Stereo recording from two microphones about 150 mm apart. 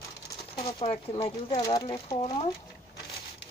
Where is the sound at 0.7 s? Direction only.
40° left (ahead or behind).